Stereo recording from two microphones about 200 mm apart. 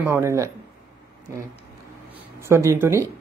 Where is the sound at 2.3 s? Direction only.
15° right (ahead or behind).